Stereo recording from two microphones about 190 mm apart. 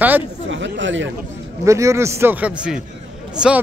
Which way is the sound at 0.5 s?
75° right (ahead or behind).